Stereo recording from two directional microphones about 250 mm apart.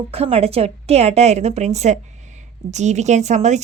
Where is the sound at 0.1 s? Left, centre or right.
Right.